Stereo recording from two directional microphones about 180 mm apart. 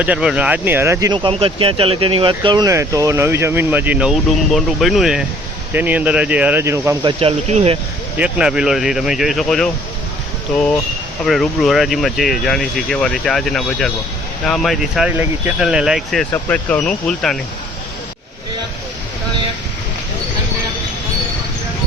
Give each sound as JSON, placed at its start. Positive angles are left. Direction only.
{"t": 0.0, "sound": "speech", "side_deg": -5}
{"t": 7.0, "sound": "speech", "side_deg": -30}
{"t": 8.1, "sound": "speech", "side_deg": -5}
{"t": 11.3, "sound": "speech", "side_deg": 0}